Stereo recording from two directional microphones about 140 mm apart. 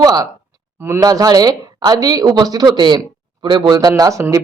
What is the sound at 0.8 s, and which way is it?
Speech, 15° right (ahead or behind).